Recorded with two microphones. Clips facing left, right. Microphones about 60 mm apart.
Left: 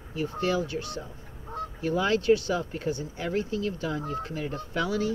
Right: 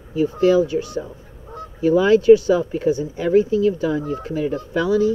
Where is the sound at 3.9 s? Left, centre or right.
Centre.